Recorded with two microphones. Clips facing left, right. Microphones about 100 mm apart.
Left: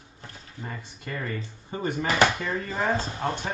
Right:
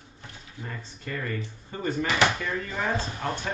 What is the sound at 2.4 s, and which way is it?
Speech, 35° left (ahead or behind).